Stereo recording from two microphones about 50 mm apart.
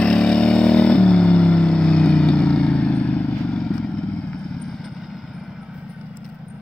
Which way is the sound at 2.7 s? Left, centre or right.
Left.